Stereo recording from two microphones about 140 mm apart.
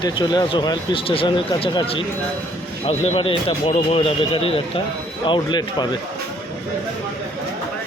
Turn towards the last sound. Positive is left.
turn(degrees=30)  # may be behind; listen again after turning